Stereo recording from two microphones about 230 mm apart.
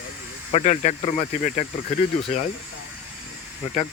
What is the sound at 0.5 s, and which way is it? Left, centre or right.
Speech, left.